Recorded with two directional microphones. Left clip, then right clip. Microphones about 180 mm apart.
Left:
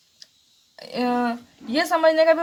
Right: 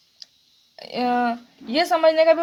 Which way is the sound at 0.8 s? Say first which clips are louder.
Right 2 dB; 15° right (ahead or behind).